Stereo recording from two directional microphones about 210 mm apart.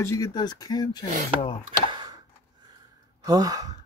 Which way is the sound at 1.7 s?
20° right (ahead or behind).